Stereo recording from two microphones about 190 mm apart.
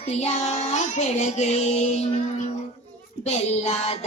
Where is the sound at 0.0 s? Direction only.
35° left (ahead or behind).